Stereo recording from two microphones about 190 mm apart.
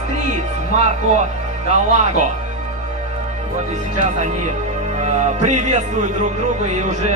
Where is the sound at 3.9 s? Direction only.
40° right (ahead or behind).